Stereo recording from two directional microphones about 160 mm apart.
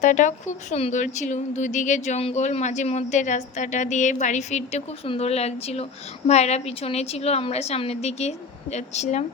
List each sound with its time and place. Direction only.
0.0 s a woman's voice: 50° left (ahead or behind)